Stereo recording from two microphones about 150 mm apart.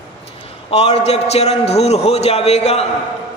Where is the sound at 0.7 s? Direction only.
45° left (ahead or behind).